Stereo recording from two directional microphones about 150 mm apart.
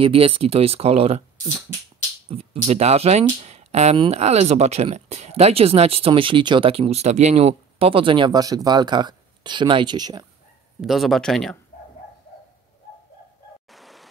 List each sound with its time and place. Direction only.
0.0 s speech: 40° right (ahead or behind)
2.2 s speech: 40° right (ahead or behind)
10.8 s a man's voice: centre (ahead or behind)
13.7 s stream: centre (ahead or behind)